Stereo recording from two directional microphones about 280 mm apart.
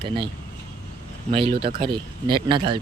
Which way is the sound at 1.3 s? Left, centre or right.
Centre.